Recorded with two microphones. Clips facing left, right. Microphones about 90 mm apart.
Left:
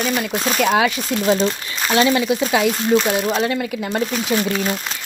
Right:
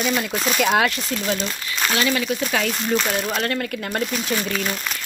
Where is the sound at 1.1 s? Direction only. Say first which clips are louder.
Left 7 dB; 25° left (ahead or behind); by 3.9 s 5° left (ahead or behind).